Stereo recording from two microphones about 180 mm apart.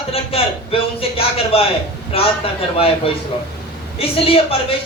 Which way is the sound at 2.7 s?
30° left (ahead or behind).